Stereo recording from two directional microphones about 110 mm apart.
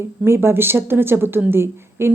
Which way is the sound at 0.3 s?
20° right (ahead or behind).